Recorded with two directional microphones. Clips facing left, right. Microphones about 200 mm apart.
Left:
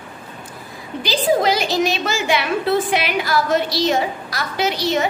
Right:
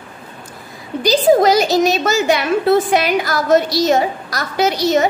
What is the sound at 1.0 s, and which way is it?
A woman's voice, 45° right (ahead or behind).